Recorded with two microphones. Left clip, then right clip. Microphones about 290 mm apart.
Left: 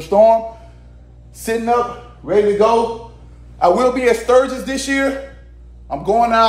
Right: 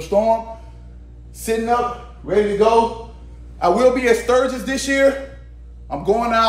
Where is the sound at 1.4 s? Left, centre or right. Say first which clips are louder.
Left 1 dB; left.